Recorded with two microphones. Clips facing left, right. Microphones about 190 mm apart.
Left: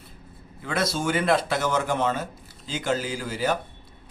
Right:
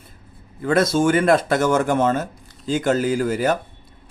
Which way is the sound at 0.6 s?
50° right (ahead or behind).